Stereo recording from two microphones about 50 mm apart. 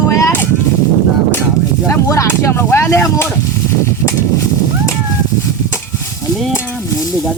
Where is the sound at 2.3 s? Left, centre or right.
Left.